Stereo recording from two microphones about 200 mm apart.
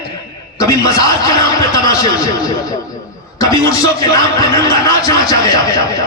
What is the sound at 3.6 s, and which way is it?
Speech, 15° left (ahead or behind).